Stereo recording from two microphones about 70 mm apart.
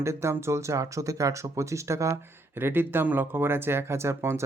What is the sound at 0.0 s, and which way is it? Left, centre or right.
Speech, right.